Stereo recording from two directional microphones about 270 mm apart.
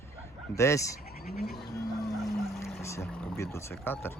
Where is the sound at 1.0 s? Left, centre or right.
Left.